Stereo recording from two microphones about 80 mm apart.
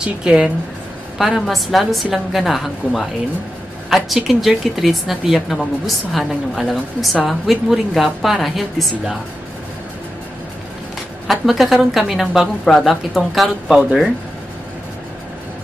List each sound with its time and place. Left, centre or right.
0.0 s a woman's voice: centre
11.2 s speech: centre